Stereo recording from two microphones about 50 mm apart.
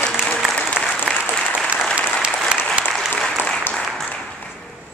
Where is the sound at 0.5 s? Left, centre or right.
Centre.